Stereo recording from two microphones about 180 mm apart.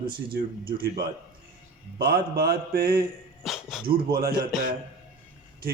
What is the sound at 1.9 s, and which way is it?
A man's voice, 60° right (ahead or behind).